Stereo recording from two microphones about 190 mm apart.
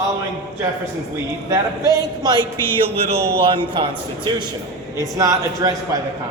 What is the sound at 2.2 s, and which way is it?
A man's voice, 20° right (ahead or behind).